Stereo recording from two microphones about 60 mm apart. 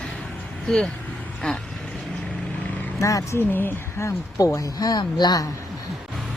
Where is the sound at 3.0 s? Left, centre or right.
Left.